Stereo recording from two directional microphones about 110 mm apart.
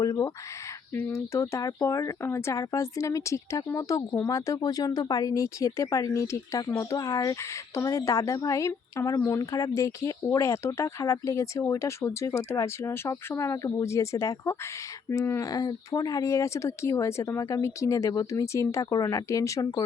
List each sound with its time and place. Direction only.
0.0 s speech: 35° left (ahead or behind)
0.9 s speech: 25° left (ahead or behind)